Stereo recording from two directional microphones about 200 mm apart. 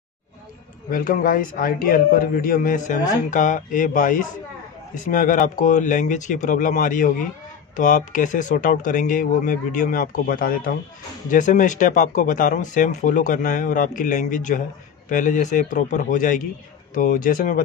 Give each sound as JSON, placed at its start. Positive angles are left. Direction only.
{"t": 0.8, "sound": "a man's voice", "side_deg": 45}